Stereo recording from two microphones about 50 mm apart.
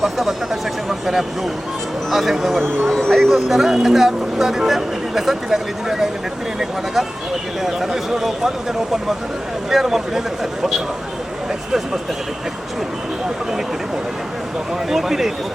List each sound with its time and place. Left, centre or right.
0.0 s speech: centre
0.9 s a sound: centre
2.0 s speech: centre
7.6 s speech: centre
14.8 s speech: centre